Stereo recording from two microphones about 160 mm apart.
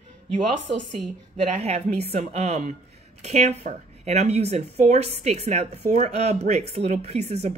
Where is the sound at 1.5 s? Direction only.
40° right (ahead or behind).